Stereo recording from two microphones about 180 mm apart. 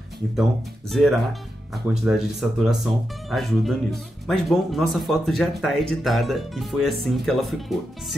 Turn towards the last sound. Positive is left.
turn(degrees=0)  # may be behind; listen again after turning